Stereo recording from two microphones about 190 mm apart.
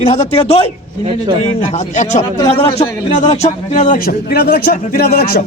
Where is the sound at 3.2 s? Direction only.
35° left (ahead or behind).